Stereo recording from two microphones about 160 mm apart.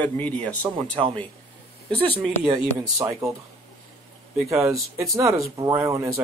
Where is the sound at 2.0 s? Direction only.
10° left (ahead or behind).